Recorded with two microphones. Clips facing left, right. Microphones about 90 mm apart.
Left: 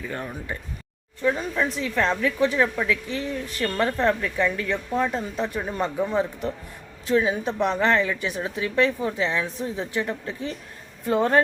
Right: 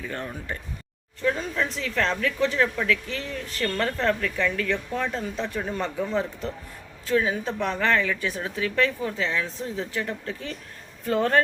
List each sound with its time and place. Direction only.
0.1 s a woman's voice: 15° left (ahead or behind)